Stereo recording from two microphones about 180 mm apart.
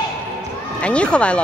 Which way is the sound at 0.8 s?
5° left (ahead or behind).